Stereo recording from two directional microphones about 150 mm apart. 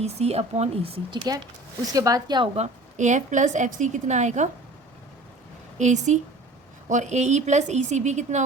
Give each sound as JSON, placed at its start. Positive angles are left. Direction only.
{"t": 0.0, "sound": "a woman's voice", "side_deg": -45}
{"t": 1.9, "sound": "speech", "side_deg": -25}
{"t": 2.6, "sound": "a woman's voice", "side_deg": -55}
{"t": 5.7, "sound": "a woman's voice", "side_deg": -50}